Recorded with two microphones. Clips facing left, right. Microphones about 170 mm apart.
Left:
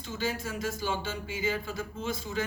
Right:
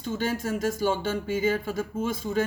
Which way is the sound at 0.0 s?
50° right (ahead or behind).